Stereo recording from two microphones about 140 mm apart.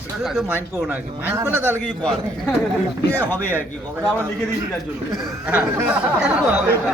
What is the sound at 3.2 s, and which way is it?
Speech, 15° left (ahead or behind).